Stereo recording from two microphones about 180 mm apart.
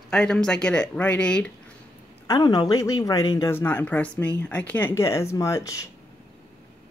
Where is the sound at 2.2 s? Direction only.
20° left (ahead or behind).